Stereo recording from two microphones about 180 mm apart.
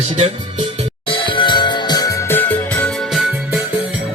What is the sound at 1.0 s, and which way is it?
Music, 30° left (ahead or behind).